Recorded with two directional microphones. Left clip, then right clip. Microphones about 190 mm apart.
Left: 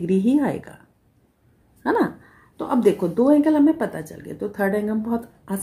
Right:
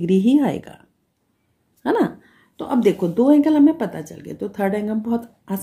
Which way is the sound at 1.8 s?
35° right (ahead or behind).